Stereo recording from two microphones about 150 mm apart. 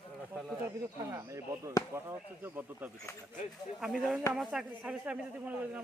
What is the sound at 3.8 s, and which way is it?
Speech, 5° right (ahead or behind).